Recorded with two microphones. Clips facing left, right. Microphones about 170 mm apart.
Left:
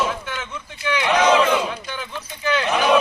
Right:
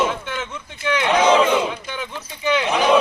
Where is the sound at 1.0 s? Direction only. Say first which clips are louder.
Right 1 dB; 25° right (ahead or behind).